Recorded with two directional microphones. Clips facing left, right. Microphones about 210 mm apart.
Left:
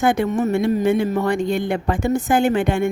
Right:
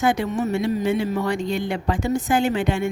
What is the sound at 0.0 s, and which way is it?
Speech, 55° left (ahead or behind).